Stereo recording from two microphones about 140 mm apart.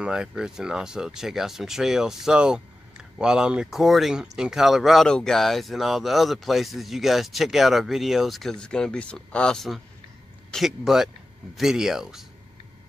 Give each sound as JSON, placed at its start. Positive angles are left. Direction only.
{"t": 0.0, "sound": "speech", "side_deg": -5}